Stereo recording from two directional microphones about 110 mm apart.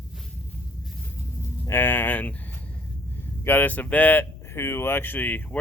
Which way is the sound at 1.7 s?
20° left (ahead or behind).